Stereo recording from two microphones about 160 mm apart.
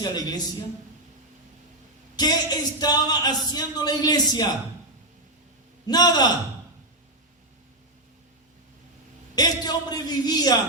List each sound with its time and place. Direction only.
0.0 s speech: 25° left (ahead or behind)
2.1 s speech: 25° left (ahead or behind)
5.8 s speech: 25° left (ahead or behind)
9.3 s speech: 25° left (ahead or behind)